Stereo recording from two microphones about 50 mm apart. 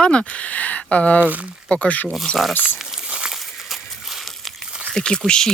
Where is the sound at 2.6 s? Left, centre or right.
Centre.